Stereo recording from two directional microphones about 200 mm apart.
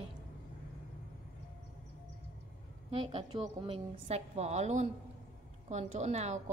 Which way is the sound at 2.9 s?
25° right (ahead or behind).